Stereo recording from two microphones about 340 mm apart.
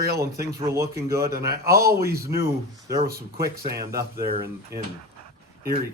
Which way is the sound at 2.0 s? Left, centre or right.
Right.